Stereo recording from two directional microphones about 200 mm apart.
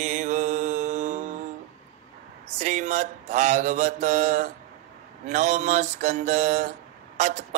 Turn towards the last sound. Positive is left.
turn(degrees=-35)  # may be behind; listen again after turning